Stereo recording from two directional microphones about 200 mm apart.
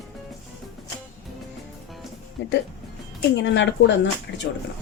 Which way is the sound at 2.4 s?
65° left (ahead or behind).